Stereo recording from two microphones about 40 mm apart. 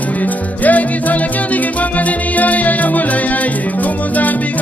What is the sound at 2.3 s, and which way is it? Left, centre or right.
Music, left.